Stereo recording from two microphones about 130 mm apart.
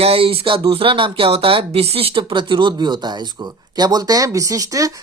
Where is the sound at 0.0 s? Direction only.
45° right (ahead or behind).